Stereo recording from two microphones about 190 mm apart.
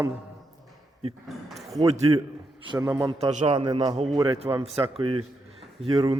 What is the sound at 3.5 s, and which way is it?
A man's voice, 25° right (ahead or behind).